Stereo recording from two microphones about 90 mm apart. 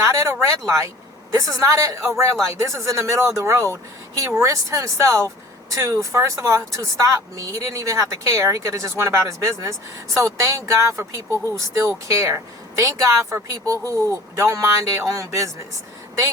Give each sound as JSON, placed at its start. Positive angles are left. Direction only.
{"t": 0.0, "sound": "speech", "side_deg": -35}